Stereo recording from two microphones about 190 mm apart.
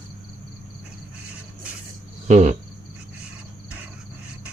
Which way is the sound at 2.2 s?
40° right (ahead or behind).